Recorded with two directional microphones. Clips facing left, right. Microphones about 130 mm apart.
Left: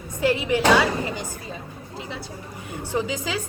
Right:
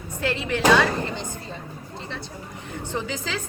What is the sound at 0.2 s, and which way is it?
A woman's voice, 15° left (ahead or behind).